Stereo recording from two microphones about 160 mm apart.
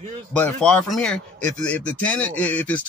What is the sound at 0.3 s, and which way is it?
A man's voice, 5° left (ahead or behind).